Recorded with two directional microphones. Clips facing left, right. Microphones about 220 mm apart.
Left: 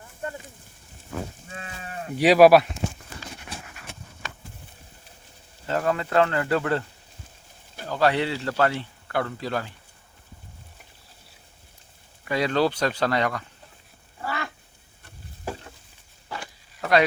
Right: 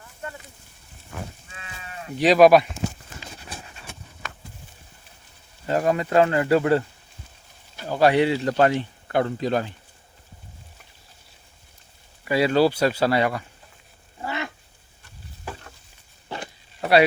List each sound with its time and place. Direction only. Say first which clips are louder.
1.5 s livestock: left 4 dB; 45° left (ahead or behind)
2.1 s speech: even; 10° left (ahead or behind)
5.6 s speech: right 3 dB; 15° right (ahead or behind)
7.9 s speech: right 5 dB; 15° right (ahead or behind)
12.2 s speech: right 4 dB; 10° right (ahead or behind)
14.2 s cat: right 2 dB; 20° right (ahead or behind)
16.3 s a sound: right 3 dB; 25° right (ahead or behind)